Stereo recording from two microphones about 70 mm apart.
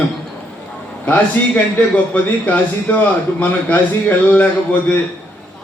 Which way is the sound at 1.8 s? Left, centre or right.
Left.